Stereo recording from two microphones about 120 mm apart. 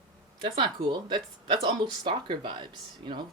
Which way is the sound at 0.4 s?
40° right (ahead or behind).